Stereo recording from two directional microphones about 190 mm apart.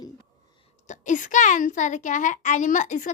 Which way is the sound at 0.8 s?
40° left (ahead or behind).